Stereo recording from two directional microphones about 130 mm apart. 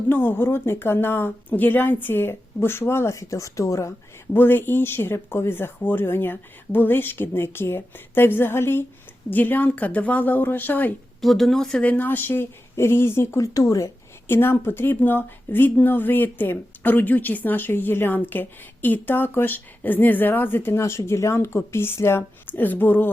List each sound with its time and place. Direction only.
0.1 s a woman's voice: 15° left (ahead or behind)
11.2 s a woman's voice: centre (ahead or behind)